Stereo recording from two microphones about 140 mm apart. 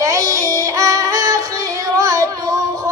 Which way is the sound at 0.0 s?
25° right (ahead or behind).